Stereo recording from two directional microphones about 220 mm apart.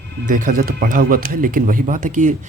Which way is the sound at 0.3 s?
35° right (ahead or behind).